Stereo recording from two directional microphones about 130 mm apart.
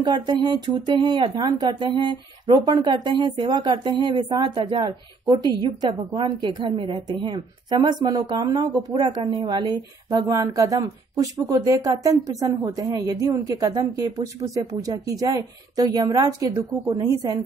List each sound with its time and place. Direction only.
0.0 s a woman's voice: 35° right (ahead or behind)